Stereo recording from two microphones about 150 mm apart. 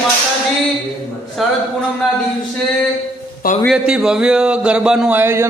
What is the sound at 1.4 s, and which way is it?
Speech, centre (ahead or behind).